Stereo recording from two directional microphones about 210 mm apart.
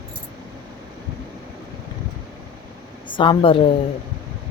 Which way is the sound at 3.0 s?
20° left (ahead or behind).